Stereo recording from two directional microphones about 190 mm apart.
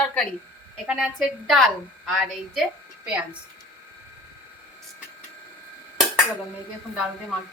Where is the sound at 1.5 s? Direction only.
Centre (ahead or behind).